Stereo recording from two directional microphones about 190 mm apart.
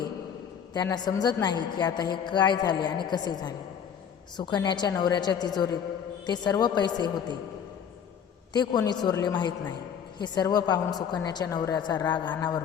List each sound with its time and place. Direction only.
0.7 s a woman's voice: 20° left (ahead or behind)
8.5 s a woman's voice: 20° left (ahead or behind)